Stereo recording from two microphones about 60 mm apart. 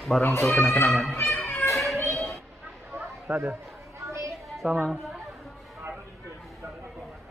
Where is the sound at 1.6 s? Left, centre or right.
Left.